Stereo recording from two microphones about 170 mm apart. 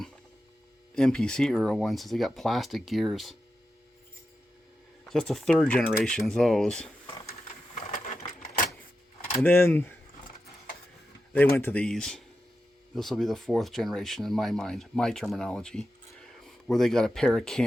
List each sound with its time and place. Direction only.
0.9 s speech: 5° left (ahead or behind)
5.0 s speech: centre (ahead or behind)
7.4 s sewing machine: 50° left (ahead or behind)
8.4 s vehicle: 55° left (ahead or behind)
9.4 s speech: 10° left (ahead or behind)
11.3 s speech: 10° left (ahead or behind)